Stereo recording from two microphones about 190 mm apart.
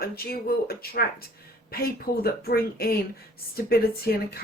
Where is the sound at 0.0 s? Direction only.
55° left (ahead or behind).